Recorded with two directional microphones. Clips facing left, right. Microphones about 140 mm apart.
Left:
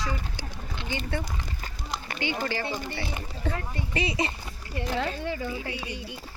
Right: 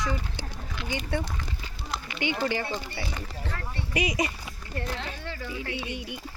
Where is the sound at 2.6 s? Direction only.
20° left (ahead or behind).